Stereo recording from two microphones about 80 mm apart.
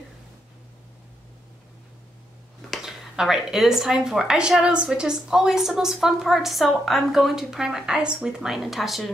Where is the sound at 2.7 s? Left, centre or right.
Centre.